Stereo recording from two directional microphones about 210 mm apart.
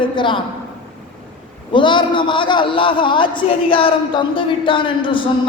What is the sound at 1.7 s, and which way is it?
A woman's voice, 20° left (ahead or behind).